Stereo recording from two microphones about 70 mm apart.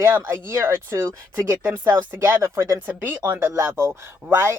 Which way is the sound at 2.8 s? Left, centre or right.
Right.